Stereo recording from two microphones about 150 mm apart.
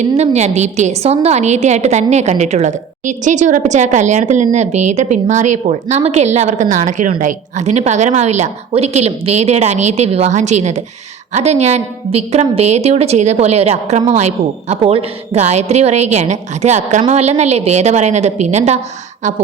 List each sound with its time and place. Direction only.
0.2 s a woman's voice: 50° right (ahead or behind)